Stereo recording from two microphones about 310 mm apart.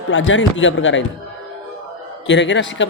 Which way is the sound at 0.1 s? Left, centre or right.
Left.